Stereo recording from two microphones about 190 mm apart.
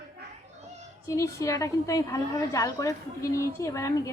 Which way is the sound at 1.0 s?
15° left (ahead or behind).